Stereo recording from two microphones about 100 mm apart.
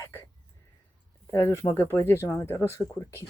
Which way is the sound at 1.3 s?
25° left (ahead or behind).